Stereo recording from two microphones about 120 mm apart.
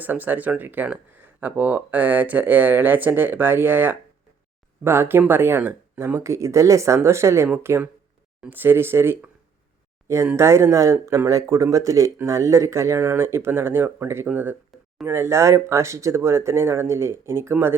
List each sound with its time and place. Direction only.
0.0 s speech: 15° right (ahead or behind)
10.3 s speech: 20° right (ahead or behind)